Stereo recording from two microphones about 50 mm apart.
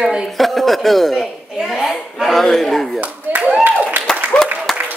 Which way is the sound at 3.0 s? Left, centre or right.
Right.